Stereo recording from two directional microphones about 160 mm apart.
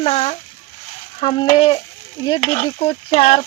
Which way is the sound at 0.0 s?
35° left (ahead or behind).